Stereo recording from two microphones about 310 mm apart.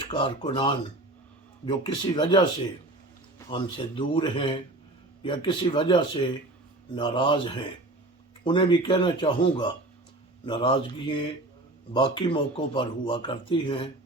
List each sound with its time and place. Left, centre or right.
0.1 s speech: centre